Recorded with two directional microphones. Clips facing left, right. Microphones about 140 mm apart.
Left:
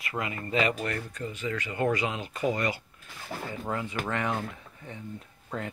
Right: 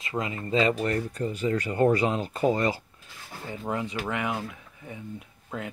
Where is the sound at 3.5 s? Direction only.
20° right (ahead or behind).